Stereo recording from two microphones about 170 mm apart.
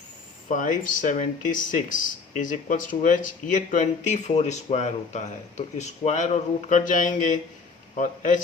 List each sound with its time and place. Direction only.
0.4 s speech: 50° left (ahead or behind)